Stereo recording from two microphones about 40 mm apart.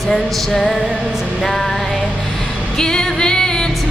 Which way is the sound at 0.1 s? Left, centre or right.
Centre.